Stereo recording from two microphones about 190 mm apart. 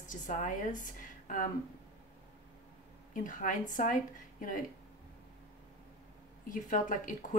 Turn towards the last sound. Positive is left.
turn(degrees=45)  # may be behind; listen again after turning